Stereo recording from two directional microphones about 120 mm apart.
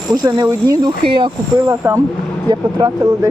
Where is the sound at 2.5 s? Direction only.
35° right (ahead or behind).